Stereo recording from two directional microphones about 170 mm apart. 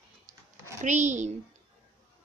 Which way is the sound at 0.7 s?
45° right (ahead or behind).